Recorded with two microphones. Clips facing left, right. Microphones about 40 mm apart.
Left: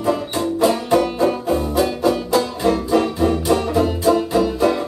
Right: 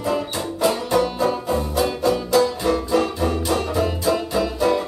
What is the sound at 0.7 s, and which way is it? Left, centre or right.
Music, left.